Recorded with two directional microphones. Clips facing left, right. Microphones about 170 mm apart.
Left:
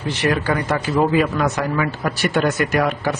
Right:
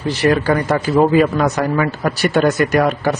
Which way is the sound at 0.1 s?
40° right (ahead or behind).